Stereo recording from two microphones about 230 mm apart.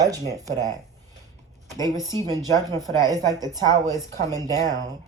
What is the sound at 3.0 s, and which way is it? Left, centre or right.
Speech, centre.